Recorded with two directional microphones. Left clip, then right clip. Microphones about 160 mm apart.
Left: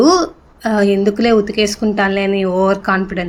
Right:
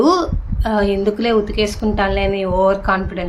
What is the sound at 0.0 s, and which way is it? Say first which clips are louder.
A woman's voice: left 3 dB; 20° left (ahead or behind).